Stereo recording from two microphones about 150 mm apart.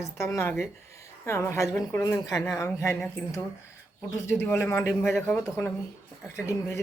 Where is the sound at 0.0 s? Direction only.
20° left (ahead or behind).